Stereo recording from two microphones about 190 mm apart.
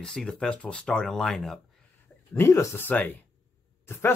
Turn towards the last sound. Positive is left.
turn(degrees=15)  # may be behind; listen again after turning